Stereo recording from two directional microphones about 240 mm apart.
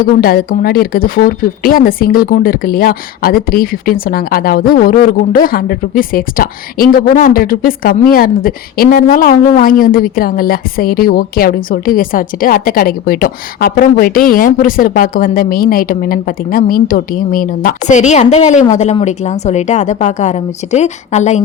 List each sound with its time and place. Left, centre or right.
0.0 s a woman's voice: left